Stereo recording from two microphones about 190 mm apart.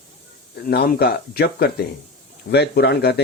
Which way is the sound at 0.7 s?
55° left (ahead or behind).